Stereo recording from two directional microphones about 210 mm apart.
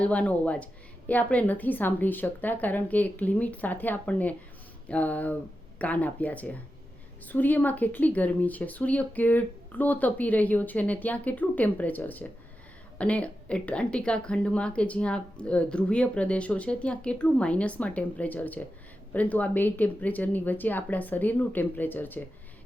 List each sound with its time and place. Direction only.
0.0 s a woman's voice: 5° left (ahead or behind)